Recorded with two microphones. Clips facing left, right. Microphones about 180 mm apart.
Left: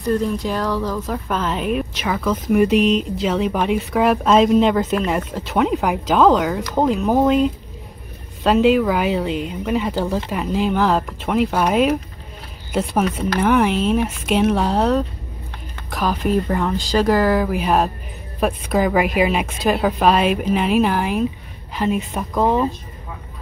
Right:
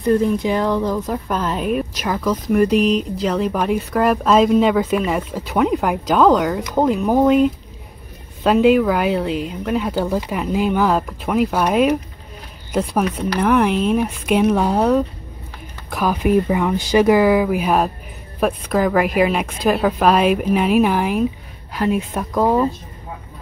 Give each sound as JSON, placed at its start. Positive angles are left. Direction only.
{"t": 0.2, "sound": "speech", "side_deg": -20}
{"t": 8.5, "sound": "speech", "side_deg": 0}